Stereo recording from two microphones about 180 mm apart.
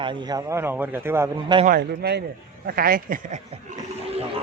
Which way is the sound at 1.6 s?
60° right (ahead or behind).